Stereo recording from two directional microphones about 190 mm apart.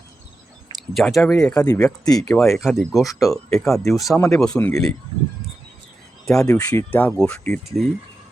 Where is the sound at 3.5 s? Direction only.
Centre (ahead or behind).